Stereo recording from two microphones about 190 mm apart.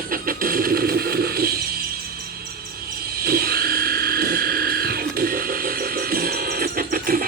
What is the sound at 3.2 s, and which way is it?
Music, 55° right (ahead or behind).